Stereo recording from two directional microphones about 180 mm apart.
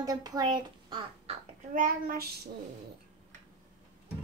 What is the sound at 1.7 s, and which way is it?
Speech, 50° right (ahead or behind).